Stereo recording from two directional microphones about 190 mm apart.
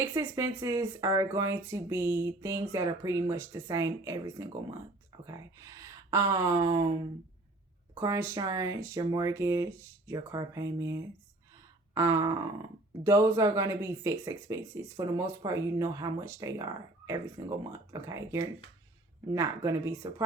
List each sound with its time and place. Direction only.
0.0 s speech: 15° right (ahead or behind)
7.9 s speech: 15° right (ahead or behind)
11.9 s a sound: 20° right (ahead or behind)
13.1 s speech: 15° right (ahead or behind)